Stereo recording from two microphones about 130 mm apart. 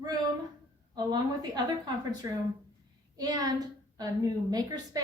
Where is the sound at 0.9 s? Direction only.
30° right (ahead or behind).